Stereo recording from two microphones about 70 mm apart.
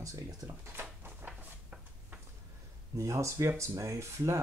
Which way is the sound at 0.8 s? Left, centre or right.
Right.